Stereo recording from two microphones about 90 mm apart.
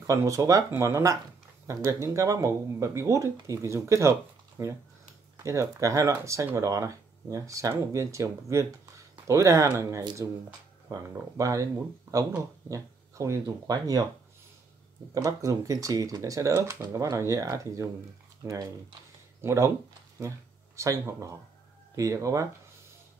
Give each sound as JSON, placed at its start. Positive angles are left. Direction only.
{"t": 0.0, "sound": "speech", "side_deg": -35}
{"t": 15.1, "sound": "speech", "side_deg": -35}
{"t": 20.2, "sound": "a sound", "side_deg": -35}
{"t": 21.9, "sound": "speech", "side_deg": -40}